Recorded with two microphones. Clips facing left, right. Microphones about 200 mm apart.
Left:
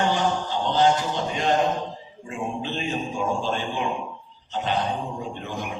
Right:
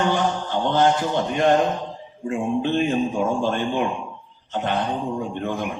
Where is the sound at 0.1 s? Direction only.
55° right (ahead or behind).